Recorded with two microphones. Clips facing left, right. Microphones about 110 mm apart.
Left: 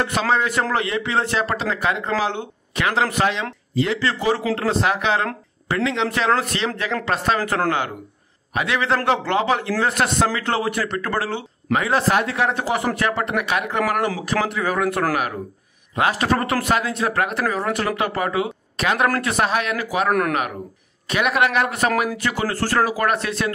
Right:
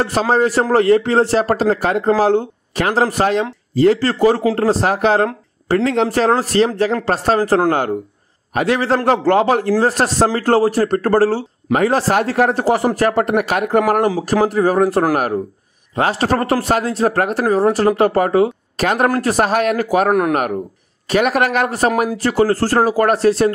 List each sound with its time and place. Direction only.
0.0 s a man's voice: 35° right (ahead or behind)
20.1 s speech: 20° right (ahead or behind)
21.1 s a man's voice: 40° right (ahead or behind)